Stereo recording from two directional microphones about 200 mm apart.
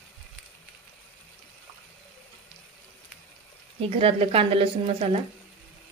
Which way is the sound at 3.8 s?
30° right (ahead or behind).